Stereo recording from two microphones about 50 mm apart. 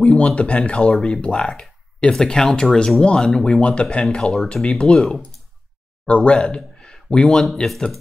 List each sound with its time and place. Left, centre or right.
0.0 s a man's voice: left
3.6 s a man's voice: left
6.0 s speech: left; by 7.8 s centre